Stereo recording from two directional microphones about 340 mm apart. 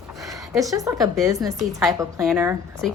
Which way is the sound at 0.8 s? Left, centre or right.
Centre.